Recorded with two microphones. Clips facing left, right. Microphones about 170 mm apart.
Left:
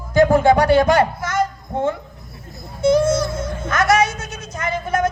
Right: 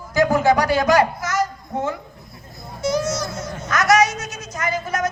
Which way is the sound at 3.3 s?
55° left (ahead or behind).